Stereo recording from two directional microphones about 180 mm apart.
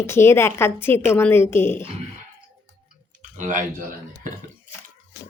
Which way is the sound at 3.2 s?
45° right (ahead or behind).